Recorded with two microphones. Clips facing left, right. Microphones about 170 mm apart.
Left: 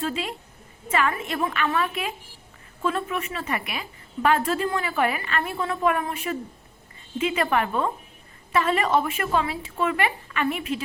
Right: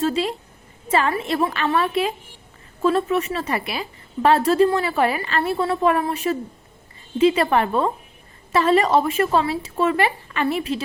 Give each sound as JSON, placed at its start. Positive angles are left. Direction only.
{"t": 0.0, "sound": "a woman's voice", "side_deg": -35}